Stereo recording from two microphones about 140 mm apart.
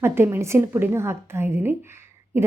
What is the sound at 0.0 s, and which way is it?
A woman's voice, 15° right (ahead or behind).